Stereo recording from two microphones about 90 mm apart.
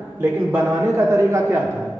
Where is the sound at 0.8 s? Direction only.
35° right (ahead or behind).